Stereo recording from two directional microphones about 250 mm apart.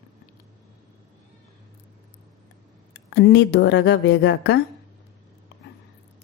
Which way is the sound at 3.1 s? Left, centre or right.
Left.